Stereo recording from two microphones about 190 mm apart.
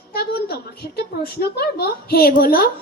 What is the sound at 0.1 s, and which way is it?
A woman's voice, 55° left (ahead or behind).